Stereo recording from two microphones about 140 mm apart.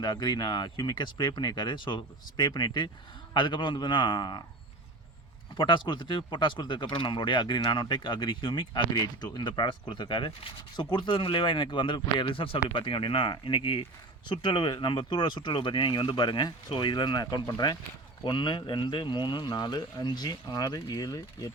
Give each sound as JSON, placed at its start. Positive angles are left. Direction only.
{"t": 0.0, "sound": "speech", "side_deg": 30}
{"t": 5.5, "sound": "speech", "side_deg": 35}